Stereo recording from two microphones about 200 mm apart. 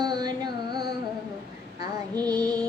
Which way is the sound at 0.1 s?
20° right (ahead or behind).